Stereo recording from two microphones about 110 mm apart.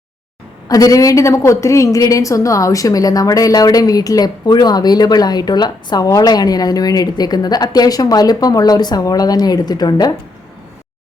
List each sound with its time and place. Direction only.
0.7 s a woman's voice: 30° left (ahead or behind)